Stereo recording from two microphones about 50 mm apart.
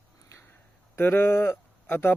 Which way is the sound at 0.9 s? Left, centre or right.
Left.